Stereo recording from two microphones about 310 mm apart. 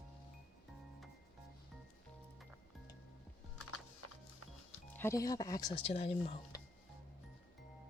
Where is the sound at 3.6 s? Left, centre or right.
Left.